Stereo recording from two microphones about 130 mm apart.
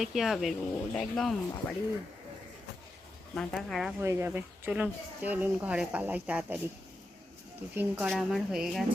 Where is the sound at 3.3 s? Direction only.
Centre (ahead or behind).